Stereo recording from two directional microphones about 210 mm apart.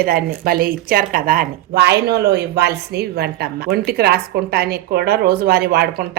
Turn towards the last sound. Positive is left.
turn(degrees=-50)  # may be behind; listen again after turning